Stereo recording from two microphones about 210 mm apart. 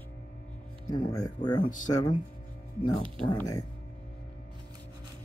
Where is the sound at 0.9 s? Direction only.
20° left (ahead or behind).